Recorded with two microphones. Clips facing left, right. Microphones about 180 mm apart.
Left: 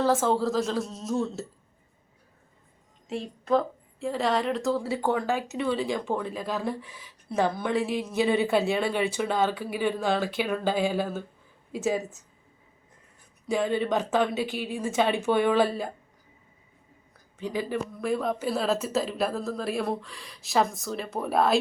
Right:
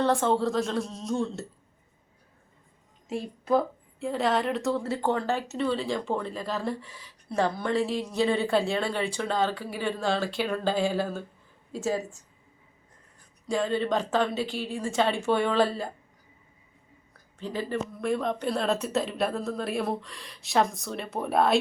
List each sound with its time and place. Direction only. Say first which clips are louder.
0.0 s speech: even; centre (ahead or behind)
3.1 s speech: even; 5° right (ahead or behind)
5.0 s speech: left 1 dB; 15° left (ahead or behind)
7.7 s speech: even; 20° left (ahead or behind)
8.0 s speech: left 1 dB; 5° left (ahead or behind)
13.5 s speech: left 1 dB; 15° left (ahead or behind)
17.4 s speech: left 1 dB; 10° left (ahead or behind)